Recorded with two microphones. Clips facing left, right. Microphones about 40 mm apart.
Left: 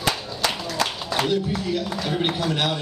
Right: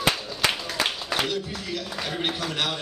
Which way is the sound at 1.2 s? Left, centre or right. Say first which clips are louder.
Left 6 dB; centre.